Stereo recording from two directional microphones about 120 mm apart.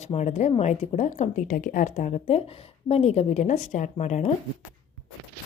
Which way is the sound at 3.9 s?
70° left (ahead or behind).